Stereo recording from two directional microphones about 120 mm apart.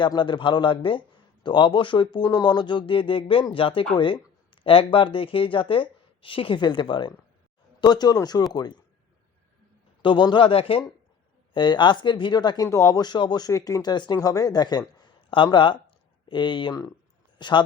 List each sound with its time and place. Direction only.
0.0 s speech: 40° left (ahead or behind)
10.0 s speech: 40° left (ahead or behind)
11.5 s speech: 40° left (ahead or behind)
12.6 s speech: 25° left (ahead or behind)